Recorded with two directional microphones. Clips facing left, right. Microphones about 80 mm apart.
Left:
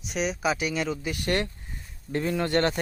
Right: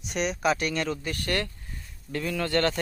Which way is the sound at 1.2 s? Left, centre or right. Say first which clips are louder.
Left 3 dB; left.